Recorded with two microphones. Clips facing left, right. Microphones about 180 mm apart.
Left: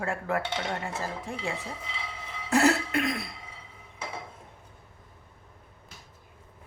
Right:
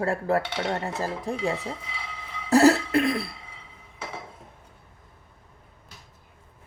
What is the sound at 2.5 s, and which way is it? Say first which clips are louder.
Cough: right 6 dB; 35° right (ahead or behind).